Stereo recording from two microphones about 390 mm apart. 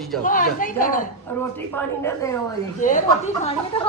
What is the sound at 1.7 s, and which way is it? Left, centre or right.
Speech, centre.